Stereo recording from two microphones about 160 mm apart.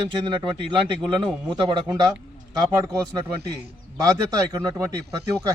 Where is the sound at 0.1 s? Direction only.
30° right (ahead or behind).